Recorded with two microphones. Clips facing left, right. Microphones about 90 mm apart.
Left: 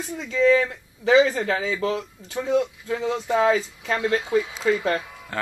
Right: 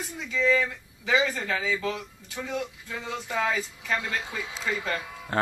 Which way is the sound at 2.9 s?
45° left (ahead or behind).